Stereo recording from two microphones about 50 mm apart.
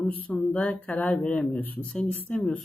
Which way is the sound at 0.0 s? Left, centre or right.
Left.